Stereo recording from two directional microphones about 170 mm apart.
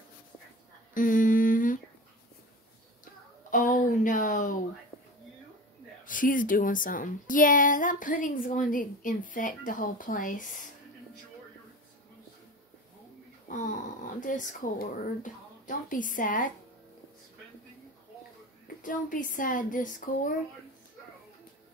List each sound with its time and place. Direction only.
0.9 s humming: 50° left (ahead or behind)
3.4 s a sound: 50° left (ahead or behind)
6.0 s a woman's voice: 50° left (ahead or behind)
14.2 s a woman's voice: 50° left (ahead or behind)
18.8 s a woman's voice: 50° left (ahead or behind)